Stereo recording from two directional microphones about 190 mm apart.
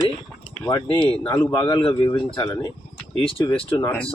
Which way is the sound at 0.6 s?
25° left (ahead or behind).